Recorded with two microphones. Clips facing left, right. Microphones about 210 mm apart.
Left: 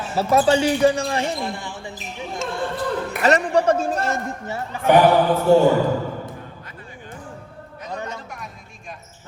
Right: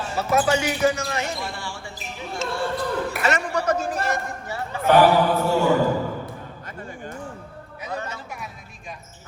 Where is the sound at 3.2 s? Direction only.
35° left (ahead or behind).